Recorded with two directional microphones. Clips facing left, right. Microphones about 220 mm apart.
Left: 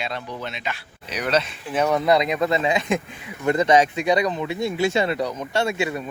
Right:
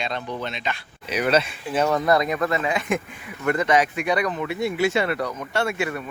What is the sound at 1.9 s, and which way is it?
A man's voice, 20° left (ahead or behind).